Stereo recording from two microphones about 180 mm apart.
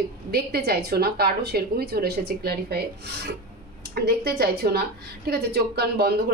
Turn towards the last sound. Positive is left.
turn(degrees=-60)  # may be behind; listen again after turning